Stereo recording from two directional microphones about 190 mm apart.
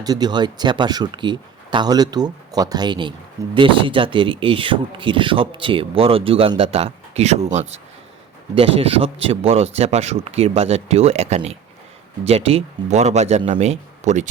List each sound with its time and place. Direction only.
0.0 s speech: 20° right (ahead or behind)
8.5 s speech: 30° right (ahead or behind)